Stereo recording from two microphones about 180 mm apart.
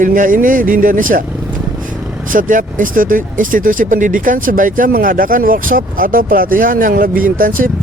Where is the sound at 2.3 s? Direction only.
45° right (ahead or behind).